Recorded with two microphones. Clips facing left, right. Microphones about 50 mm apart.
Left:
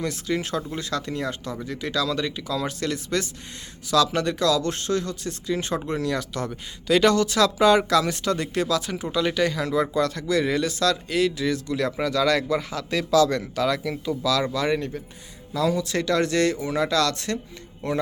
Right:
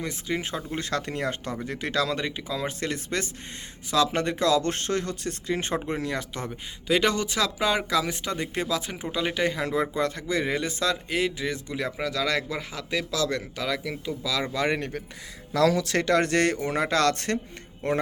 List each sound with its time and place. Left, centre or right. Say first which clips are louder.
0.0 s speech: left 3 dB; centre
0.8 s speech: left 1 dB; right
2.2 s speech: left 3 dB; right
11.9 s speech: left 5 dB; centre
14.3 s speech: left 6 dB; centre
14.5 s speech: left 2 dB; right
15.5 s speech: right 1 dB; right